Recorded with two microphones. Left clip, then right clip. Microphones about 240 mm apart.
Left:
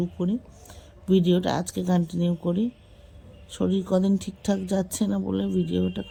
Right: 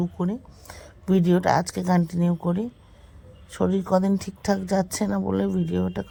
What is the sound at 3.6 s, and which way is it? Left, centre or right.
Speech, right.